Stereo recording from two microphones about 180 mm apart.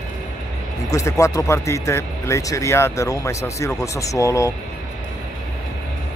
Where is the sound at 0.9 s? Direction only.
15° left (ahead or behind).